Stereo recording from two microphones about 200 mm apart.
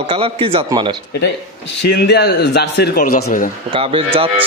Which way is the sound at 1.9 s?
55° left (ahead or behind).